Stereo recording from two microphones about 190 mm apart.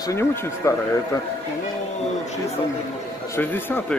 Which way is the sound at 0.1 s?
15° left (ahead or behind).